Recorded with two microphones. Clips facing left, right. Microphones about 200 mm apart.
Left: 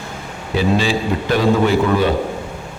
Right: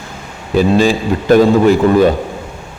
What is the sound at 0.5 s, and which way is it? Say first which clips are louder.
A man's voice: right 6 dB; 45° right (ahead or behind).